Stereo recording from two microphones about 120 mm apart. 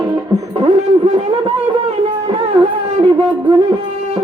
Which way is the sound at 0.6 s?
55° right (ahead or behind).